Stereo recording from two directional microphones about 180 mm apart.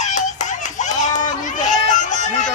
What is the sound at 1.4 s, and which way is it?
Run, 45° left (ahead or behind).